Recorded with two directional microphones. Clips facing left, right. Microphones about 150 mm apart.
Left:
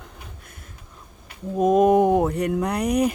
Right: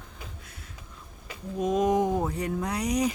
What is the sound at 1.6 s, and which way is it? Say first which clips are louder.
Speech: left 8 dB; 50° left (ahead or behind).